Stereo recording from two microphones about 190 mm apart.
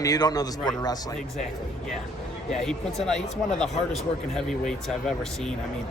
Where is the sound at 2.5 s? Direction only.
Centre (ahead or behind).